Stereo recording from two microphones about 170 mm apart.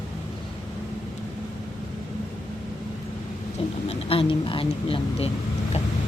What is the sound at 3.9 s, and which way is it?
Speech, 35° left (ahead or behind).